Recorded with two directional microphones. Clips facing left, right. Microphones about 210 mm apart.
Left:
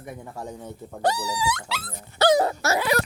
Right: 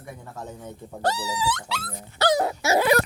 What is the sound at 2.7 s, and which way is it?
Laughter, 55° right (ahead or behind).